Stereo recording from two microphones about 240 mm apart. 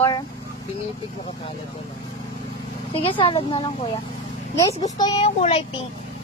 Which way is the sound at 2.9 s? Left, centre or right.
Left.